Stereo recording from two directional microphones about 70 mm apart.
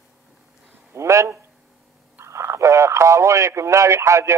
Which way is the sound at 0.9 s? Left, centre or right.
Right.